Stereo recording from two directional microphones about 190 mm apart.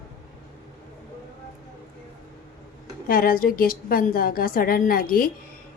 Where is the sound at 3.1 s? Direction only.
50° left (ahead or behind).